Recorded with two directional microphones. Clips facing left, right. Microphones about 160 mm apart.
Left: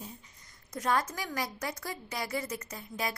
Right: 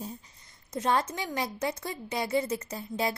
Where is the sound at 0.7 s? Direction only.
25° right (ahead or behind).